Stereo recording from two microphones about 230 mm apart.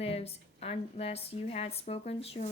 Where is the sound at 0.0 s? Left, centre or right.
Left.